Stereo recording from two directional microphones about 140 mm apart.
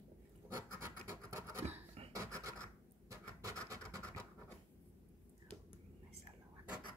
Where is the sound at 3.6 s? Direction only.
20° right (ahead or behind).